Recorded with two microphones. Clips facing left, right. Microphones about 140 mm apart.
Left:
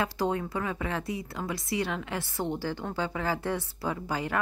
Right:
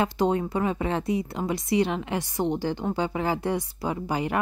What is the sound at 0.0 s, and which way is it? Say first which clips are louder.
Speech: right 5 dB; 20° right (ahead or behind).